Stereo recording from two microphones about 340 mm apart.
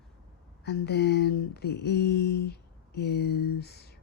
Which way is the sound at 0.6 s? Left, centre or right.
Left.